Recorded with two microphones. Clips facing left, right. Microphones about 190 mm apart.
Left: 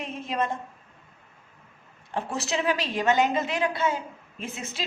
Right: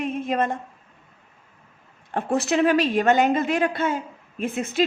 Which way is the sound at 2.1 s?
55° right (ahead or behind).